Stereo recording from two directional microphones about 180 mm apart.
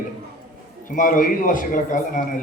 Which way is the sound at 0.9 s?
50° left (ahead or behind).